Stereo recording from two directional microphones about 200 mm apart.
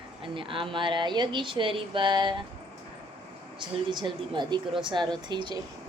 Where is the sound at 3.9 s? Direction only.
25° right (ahead or behind).